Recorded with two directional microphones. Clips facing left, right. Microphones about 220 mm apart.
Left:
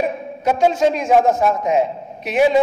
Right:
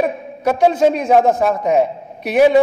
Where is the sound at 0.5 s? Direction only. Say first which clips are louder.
Right 2 dB; 60° right (ahead or behind).